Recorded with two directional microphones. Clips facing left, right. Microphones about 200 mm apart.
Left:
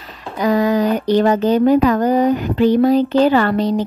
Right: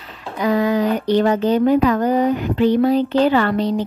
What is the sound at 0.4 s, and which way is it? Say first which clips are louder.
Speech: left 2 dB; 40° left (ahead or behind).